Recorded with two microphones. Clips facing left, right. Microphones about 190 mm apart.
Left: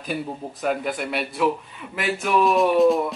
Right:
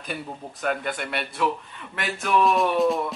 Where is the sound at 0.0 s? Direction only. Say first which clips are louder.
Left 5 dB; centre (ahead or behind).